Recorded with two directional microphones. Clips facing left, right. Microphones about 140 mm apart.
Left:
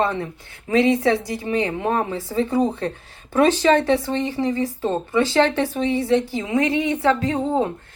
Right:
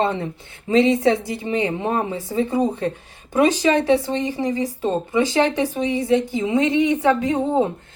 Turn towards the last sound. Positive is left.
turn(degrees=-20)  # may be behind; listen again after turning